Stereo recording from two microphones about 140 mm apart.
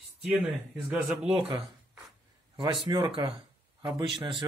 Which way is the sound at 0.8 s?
10° right (ahead or behind).